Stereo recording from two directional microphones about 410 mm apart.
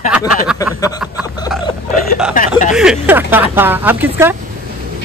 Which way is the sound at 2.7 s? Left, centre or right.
Centre.